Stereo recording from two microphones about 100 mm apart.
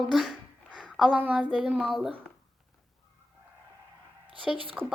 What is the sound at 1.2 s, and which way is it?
Speech, 15° right (ahead or behind).